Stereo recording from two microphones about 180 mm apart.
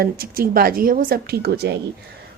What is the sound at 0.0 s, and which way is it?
A woman's voice, 55° right (ahead or behind).